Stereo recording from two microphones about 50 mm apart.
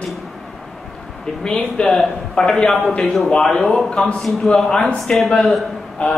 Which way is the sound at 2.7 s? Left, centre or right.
Centre.